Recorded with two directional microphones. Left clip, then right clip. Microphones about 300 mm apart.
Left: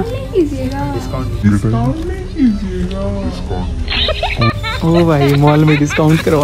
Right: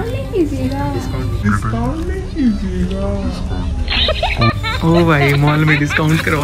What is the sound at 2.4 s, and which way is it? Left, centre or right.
Speech, centre.